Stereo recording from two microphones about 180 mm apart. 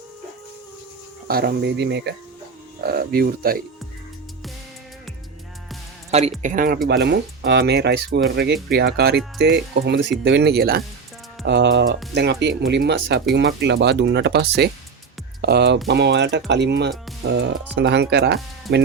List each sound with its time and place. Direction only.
1.3 s speech: 60° right (ahead or behind)
2.8 s speech: 55° right (ahead or behind)
6.1 s speech: 35° right (ahead or behind)
6.4 s speech: 45° right (ahead or behind)
6.8 s speech: 65° right (ahead or behind)
9.7 s speech: 75° right (ahead or behind)
11.4 s speech: 75° right (ahead or behind)